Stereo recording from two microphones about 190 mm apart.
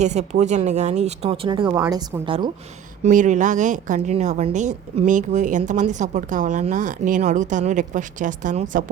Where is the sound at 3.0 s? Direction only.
40° right (ahead or behind).